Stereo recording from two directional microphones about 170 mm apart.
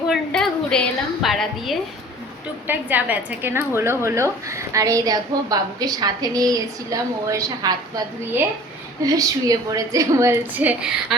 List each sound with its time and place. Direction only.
0.1 s a woman's voice: 5° left (ahead or behind)